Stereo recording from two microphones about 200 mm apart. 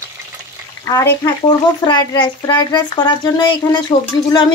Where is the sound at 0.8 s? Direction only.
15° left (ahead or behind).